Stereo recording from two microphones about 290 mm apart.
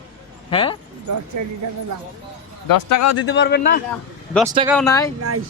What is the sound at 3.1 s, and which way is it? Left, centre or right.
Speech, left.